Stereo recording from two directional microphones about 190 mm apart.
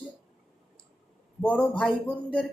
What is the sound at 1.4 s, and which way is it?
A woman's voice, 5° left (ahead or behind).